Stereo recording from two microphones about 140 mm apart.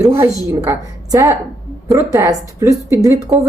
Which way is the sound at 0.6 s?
20° right (ahead or behind).